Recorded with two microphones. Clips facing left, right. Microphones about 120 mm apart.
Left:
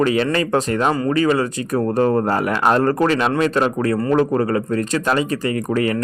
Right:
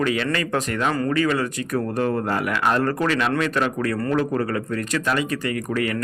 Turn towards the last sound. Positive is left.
turn(degrees=30)  # may be behind; listen again after turning